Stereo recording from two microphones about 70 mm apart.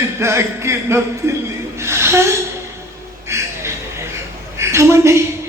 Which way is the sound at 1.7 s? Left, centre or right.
Right.